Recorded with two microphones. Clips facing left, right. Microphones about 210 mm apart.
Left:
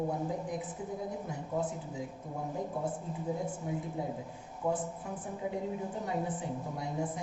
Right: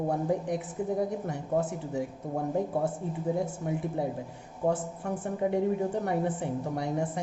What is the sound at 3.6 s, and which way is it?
Speech, 70° right (ahead or behind).